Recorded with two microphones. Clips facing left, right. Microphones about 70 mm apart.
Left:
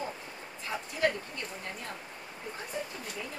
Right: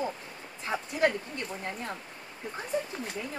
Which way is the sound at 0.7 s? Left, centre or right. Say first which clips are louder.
Right 4 dB; right.